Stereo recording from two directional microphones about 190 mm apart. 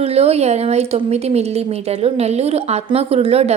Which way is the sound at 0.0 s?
30° right (ahead or behind).